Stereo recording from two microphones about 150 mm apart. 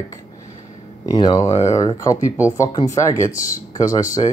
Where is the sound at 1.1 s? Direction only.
30° left (ahead or behind).